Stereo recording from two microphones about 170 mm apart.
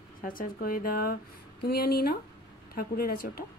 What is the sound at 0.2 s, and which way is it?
Speech, 55° left (ahead or behind).